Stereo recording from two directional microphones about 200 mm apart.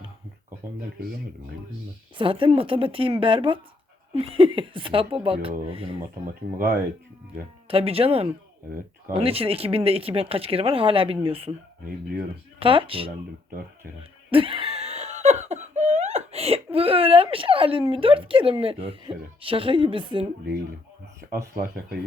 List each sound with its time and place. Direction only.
2.1 s speech: 25° right (ahead or behind)
7.7 s speech: 30° right (ahead or behind)
12.5 s speech: 25° right (ahead or behind)
13.5 s speech: 45° right (ahead or behind)
14.3 s laughter: 25° right (ahead or behind)
16.7 s speech: 30° right (ahead or behind)
21.3 s speech: 15° right (ahead or behind)